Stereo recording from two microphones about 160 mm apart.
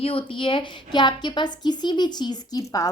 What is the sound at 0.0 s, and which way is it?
A woman's voice, 35° left (ahead or behind).